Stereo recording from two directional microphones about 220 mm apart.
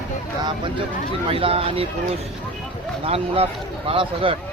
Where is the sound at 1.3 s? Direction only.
25° right (ahead or behind).